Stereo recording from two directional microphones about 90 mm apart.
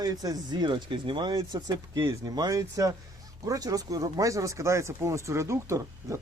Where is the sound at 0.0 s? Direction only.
45° right (ahead or behind).